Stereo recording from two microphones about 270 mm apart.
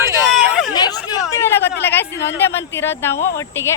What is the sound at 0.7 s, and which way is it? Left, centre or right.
Speech, centre.